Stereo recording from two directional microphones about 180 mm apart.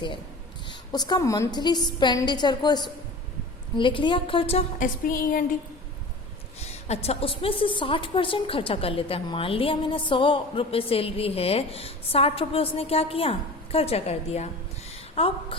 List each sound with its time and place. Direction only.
0.7 s a woman's voice: 25° left (ahead or behind)
4.8 s a sound: 50° left (ahead or behind)
6.6 s a woman's voice: 35° left (ahead or behind)